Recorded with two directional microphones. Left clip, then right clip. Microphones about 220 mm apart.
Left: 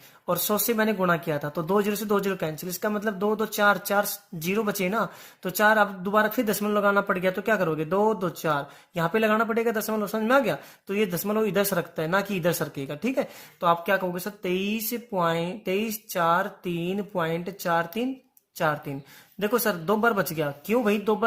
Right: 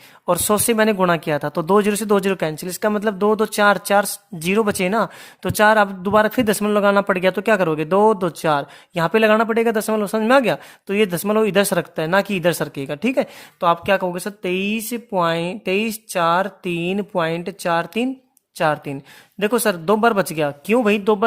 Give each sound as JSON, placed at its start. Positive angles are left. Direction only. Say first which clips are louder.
{"t": 0.3, "sound": "speech", "louder": "right 8 dB", "side_deg": -45}